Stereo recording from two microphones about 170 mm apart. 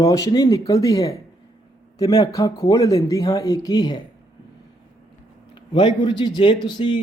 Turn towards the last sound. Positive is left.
turn(degrees=25)  # may be behind; listen again after turning